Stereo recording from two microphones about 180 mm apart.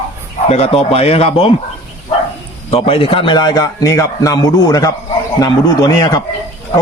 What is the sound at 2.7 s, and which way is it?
A man's voice, 30° left (ahead or behind).